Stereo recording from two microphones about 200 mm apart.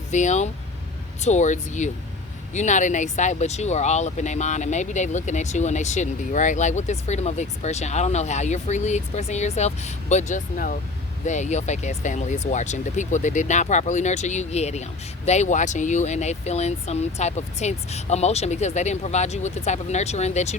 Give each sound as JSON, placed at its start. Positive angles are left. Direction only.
{"t": 0.1, "sound": "speech", "side_deg": 35}